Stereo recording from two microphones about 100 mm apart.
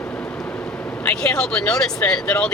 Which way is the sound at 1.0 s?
10° left (ahead or behind).